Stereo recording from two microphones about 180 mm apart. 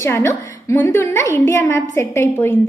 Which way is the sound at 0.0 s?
15° left (ahead or behind).